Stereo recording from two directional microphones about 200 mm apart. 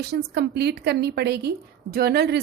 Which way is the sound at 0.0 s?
55° right (ahead or behind).